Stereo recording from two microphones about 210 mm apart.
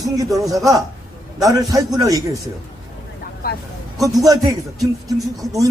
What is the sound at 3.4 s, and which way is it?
Speech, 45° left (ahead or behind).